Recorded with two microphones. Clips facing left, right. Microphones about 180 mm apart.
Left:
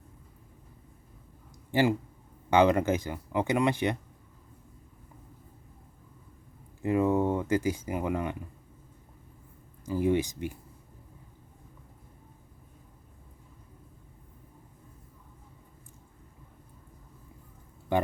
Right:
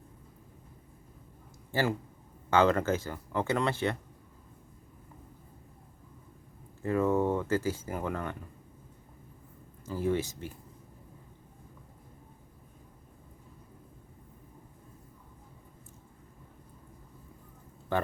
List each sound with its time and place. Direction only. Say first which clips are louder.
1.7 s speech: left 5 dB; 15° left (ahead or behind)
6.8 s speech: left 2 dB; 15° left (ahead or behind)
9.8 s speech: left 4 dB; 15° left (ahead or behind)
17.9 s speech: left 3 dB; 15° left (ahead or behind)